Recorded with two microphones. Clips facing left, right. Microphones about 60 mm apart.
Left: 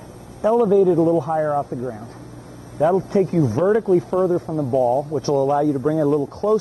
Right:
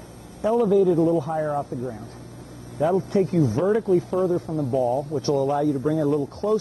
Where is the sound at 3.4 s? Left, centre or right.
Centre.